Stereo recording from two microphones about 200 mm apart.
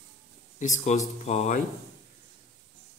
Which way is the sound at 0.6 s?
35° left (ahead or behind).